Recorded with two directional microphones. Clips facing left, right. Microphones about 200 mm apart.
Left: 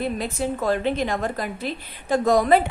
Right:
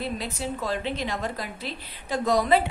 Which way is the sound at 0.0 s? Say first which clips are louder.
Left 5 dB; 50° left (ahead or behind).